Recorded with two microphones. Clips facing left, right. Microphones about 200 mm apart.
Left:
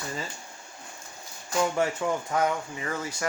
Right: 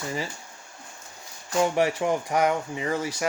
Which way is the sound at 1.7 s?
15° right (ahead or behind).